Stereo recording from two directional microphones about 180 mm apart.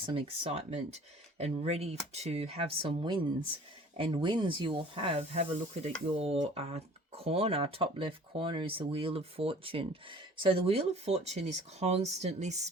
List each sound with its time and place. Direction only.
0.0 s speech: 30° right (ahead or behind)